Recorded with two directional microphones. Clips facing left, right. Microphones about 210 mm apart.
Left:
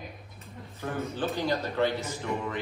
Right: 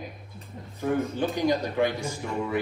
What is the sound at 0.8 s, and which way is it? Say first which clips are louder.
A man's voice: right 6 dB; 15° right (ahead or behind).